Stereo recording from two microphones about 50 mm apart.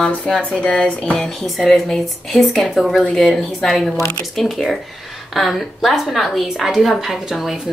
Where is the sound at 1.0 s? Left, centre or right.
Centre.